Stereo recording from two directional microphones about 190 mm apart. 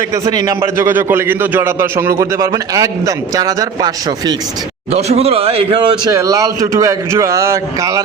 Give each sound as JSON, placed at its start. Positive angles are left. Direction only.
{"t": 0.3, "sound": "a man's voice", "side_deg": -20}
{"t": 4.9, "sound": "speech", "side_deg": -35}